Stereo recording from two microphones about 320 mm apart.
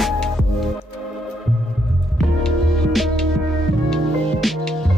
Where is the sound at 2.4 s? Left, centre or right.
Centre.